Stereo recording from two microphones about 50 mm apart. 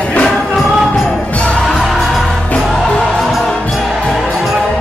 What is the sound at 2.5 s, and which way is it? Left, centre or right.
Music, centre.